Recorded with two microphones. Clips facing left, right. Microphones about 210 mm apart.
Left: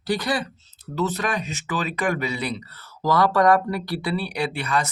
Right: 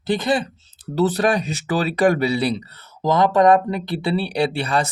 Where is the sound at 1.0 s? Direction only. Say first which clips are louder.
Right 7 dB; 35° right (ahead or behind).